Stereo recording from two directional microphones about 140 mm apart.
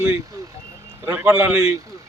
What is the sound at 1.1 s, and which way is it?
Speech, 15° right (ahead or behind).